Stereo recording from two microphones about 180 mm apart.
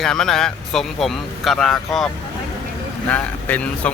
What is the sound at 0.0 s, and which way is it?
Speech, 5° left (ahead or behind).